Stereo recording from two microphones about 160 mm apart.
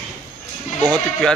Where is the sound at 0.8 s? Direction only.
5° left (ahead or behind).